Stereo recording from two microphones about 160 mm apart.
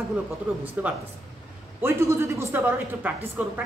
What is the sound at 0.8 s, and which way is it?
A woman's voice, 10° right (ahead or behind).